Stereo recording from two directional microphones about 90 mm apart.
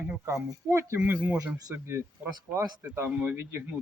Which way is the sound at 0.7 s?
30° right (ahead or behind).